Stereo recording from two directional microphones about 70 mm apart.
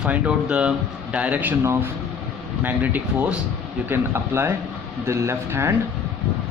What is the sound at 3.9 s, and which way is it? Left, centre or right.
A man's voice, right.